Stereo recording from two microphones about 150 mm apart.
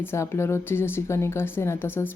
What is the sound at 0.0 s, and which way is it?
A woman's voice, 15° left (ahead or behind).